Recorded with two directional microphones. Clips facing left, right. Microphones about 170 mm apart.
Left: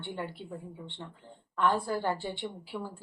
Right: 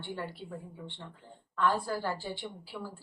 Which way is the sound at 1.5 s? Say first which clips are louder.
Left 1 dB; 20° left (ahead or behind).